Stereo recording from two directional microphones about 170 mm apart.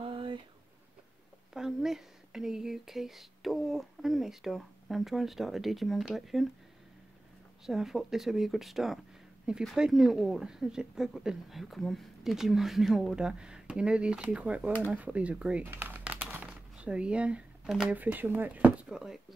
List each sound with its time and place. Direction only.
0.0 s a sound: 30° right (ahead or behind)
1.5 s speech: centre (ahead or behind)
7.6 s speech: centre (ahead or behind)